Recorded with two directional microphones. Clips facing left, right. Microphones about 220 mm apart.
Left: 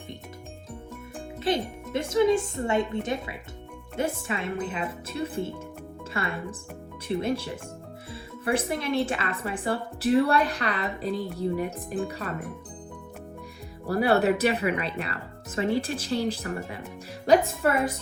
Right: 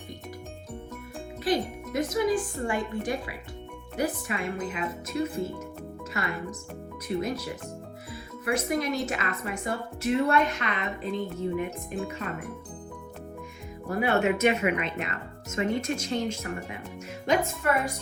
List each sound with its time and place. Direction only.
1.5 s speech: 25° left (ahead or behind)
13.9 s a woman's voice: 35° left (ahead or behind)